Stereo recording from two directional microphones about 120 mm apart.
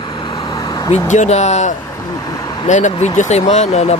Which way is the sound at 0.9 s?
70° left (ahead or behind).